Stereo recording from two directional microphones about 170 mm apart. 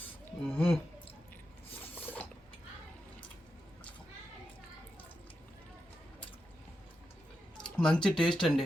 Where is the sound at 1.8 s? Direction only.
10° left (ahead or behind).